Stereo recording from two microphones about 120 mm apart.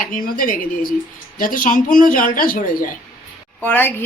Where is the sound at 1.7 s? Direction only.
90° left.